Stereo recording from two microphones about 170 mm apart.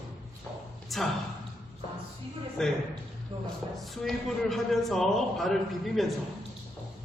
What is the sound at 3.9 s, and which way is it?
A man's voice, centre (ahead or behind).